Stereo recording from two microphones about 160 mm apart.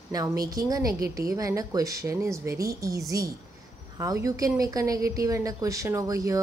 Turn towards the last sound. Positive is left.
turn(degrees=-20)  # may be behind; listen again after turning